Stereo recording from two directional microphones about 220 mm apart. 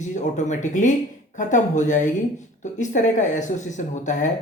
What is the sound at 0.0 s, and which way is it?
Speech, 35° left (ahead or behind).